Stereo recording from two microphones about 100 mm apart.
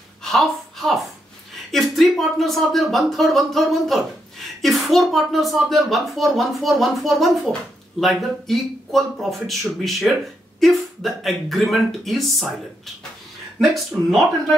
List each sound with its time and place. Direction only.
0.2 s a woman's voice: 5° left (ahead or behind)
13.9 s speech: centre (ahead or behind)